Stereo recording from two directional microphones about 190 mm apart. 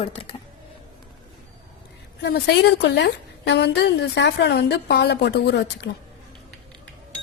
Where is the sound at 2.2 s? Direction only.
60° left (ahead or behind).